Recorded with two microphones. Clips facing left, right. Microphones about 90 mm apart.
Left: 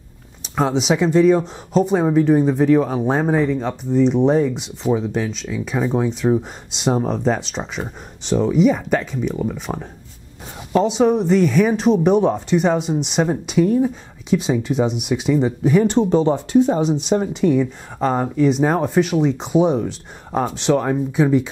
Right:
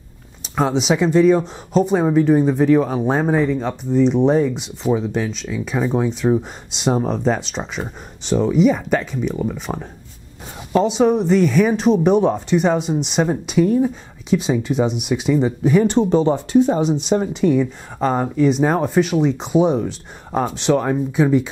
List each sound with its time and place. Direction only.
0.6 s speech: 10° right (ahead or behind)
14.4 s speech: 15° right (ahead or behind)